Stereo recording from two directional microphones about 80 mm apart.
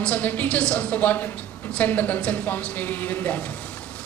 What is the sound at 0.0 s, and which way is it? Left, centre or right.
A woman's voice, centre.